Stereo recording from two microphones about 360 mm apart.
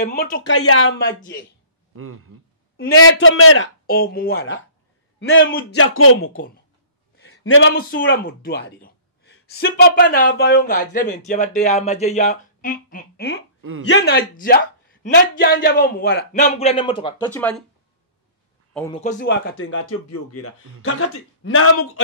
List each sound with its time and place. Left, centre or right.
0.0 s speech: left
2.0 s speech: right
2.8 s a man's voice: left
3.8 s a man's voice: left
13.6 s a man's voice: right
13.8 s speech: left; by 17.6 s centre
18.7 s a man's voice: centre
18.9 s a man's voice: left